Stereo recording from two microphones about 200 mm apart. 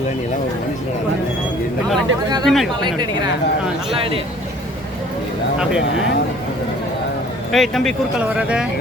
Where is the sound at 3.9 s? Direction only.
30° right (ahead or behind).